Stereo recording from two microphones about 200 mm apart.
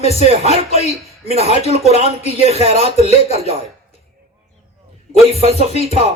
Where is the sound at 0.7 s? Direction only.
30° left (ahead or behind).